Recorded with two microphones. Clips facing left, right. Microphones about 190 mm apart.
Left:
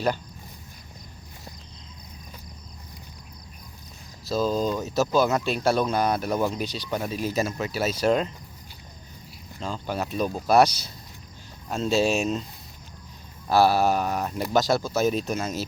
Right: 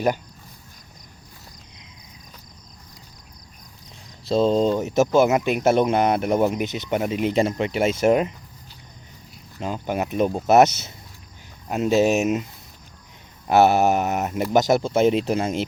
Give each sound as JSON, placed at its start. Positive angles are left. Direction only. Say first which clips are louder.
{"t": 4.3, "sound": "speech", "louder": "right 6 dB", "side_deg": -30}
{"t": 9.6, "sound": "speech", "louder": "right 4 dB", "side_deg": -20}
{"t": 13.5, "sound": "speech", "louder": "right 3 dB", "side_deg": -20}